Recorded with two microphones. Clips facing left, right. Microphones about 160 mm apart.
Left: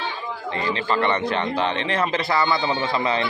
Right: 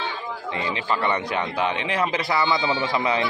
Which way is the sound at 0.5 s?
15° right (ahead or behind).